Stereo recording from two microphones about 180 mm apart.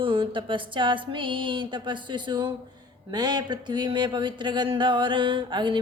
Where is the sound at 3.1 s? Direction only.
25° right (ahead or behind).